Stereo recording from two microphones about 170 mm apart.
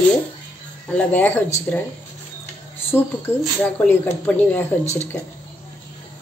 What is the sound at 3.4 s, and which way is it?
Speech, 10° left (ahead or behind).